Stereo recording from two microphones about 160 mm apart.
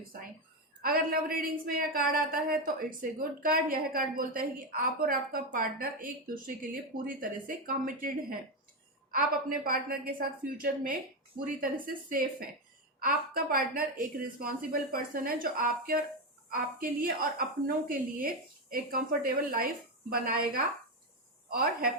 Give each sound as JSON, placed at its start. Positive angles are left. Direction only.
{"t": 0.8, "sound": "a woman's voice", "side_deg": -65}